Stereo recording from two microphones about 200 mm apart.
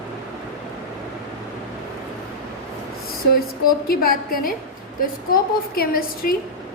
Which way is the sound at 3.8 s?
45° left (ahead or behind).